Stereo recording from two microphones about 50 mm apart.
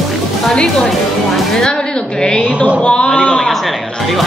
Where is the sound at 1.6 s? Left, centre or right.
Centre.